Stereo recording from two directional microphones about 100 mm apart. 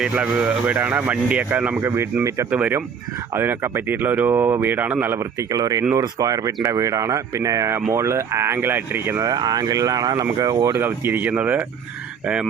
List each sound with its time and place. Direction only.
0.0 s a man's voice: 10° right (ahead or behind)
1.8 s a man's voice: 25° right (ahead or behind)
5.5 s speech: 35° right (ahead or behind)
9.2 s speech: 40° right (ahead or behind)
10.8 s a man's voice: 20° right (ahead or behind)